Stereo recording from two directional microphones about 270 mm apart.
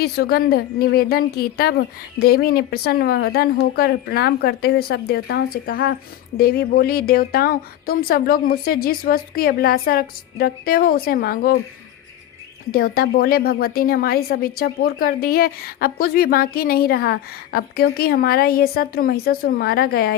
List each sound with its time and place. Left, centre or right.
0.0 s a woman's voice: left
12.7 s a woman's voice: left